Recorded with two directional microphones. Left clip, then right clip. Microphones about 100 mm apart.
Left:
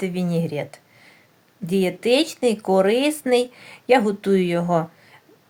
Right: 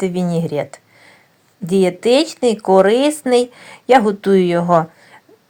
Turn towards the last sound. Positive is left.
turn(degrees=-25)  # may be behind; listen again after turning